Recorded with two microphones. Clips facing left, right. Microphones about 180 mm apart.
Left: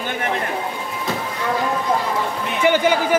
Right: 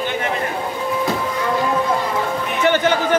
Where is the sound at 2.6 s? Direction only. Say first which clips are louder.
Left 1 dB; 10° left (ahead or behind).